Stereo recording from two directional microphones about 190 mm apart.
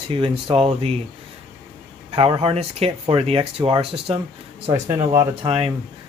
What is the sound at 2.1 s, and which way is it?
Speech, 30° right (ahead or behind).